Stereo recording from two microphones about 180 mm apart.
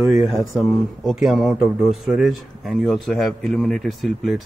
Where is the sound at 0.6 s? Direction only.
Centre (ahead or behind).